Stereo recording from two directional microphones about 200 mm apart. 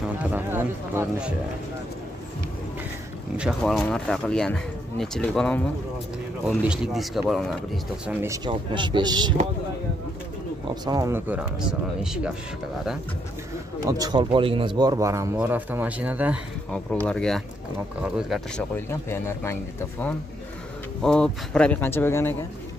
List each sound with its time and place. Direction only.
0.2 s speech: 10° right (ahead or behind)
3.3 s speech: centre (ahead or behind)
6.9 s speech: centre (ahead or behind)
8.1 s speech: 10° right (ahead or behind)
8.5 s speech: 25° right (ahead or behind)
10.7 s speech: 20° right (ahead or behind)
13.8 s speech: 20° right (ahead or behind)
16.7 s speech: 5° left (ahead or behind)
18.9 s speech: 10° left (ahead or behind)